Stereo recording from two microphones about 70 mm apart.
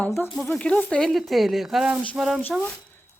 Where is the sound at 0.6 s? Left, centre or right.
Centre.